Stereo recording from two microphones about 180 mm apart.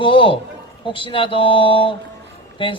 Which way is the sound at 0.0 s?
30° left (ahead or behind).